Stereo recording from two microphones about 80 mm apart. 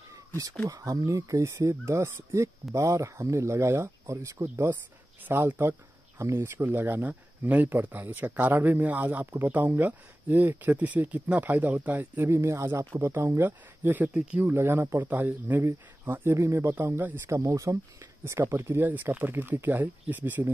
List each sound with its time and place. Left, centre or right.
0.7 s speech: right; by 14.5 s centre
14.5 s speech: right
17.4 s speech: right